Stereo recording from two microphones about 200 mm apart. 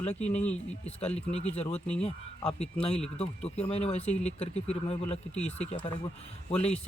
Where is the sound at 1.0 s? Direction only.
30° left (ahead or behind).